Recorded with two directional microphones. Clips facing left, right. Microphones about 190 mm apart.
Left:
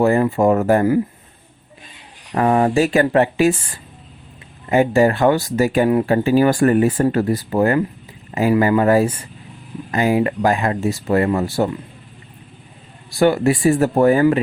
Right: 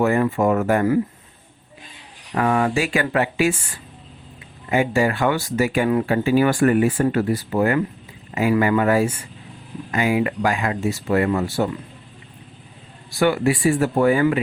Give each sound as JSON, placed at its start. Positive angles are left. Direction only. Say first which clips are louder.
{"t": 0.0, "sound": "speech", "louder": "left 3 dB", "side_deg": 35}
{"t": 2.3, "sound": "speech", "louder": "left 4 dB", "side_deg": 35}
{"t": 4.7, "sound": "speech", "louder": "left 5 dB", "side_deg": 40}
{"t": 13.1, "sound": "speech", "louder": "left 3 dB", "side_deg": 40}